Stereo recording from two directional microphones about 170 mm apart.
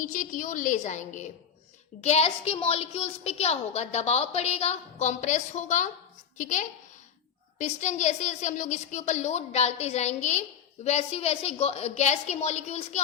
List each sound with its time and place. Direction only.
0.0 s a woman's voice: 50° left (ahead or behind)